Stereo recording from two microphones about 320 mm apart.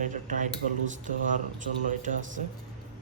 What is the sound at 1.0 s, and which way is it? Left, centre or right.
A man's voice, right.